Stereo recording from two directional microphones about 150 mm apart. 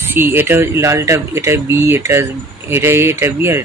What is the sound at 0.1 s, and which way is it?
Speech, 15° right (ahead or behind).